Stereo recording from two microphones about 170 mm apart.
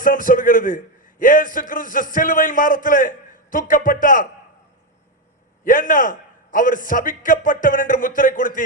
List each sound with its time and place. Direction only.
0.0 s a man's voice: 50° left (ahead or behind)
5.6 s a man's voice: 50° left (ahead or behind)